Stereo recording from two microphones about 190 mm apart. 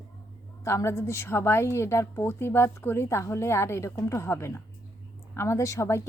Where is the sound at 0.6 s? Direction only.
15° left (ahead or behind).